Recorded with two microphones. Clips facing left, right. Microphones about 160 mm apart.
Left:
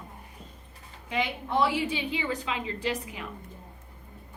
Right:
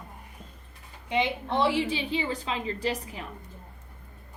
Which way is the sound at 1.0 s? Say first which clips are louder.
Right 3 dB; 25° right (ahead or behind).